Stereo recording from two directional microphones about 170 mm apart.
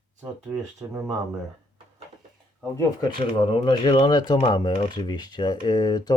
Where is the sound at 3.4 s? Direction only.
30° left (ahead or behind).